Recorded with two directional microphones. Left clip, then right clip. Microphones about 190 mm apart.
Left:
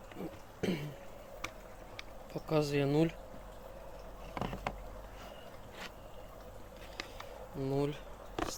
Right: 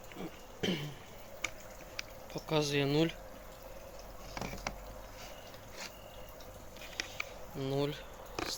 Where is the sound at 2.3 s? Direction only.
15° left (ahead or behind).